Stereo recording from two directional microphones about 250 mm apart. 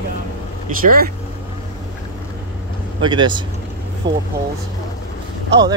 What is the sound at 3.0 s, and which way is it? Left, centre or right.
Speech, centre.